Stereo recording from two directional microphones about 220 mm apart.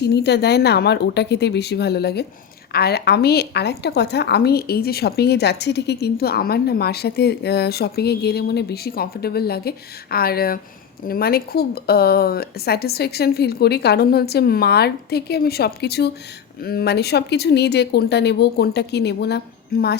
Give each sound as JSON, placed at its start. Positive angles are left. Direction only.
{"t": 0.0, "sound": "a woman's voice", "side_deg": 50}